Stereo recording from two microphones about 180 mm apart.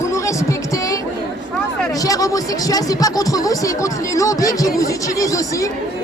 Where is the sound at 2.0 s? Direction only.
20° left (ahead or behind).